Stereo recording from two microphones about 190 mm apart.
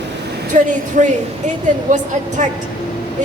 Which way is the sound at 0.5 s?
40° right (ahead or behind).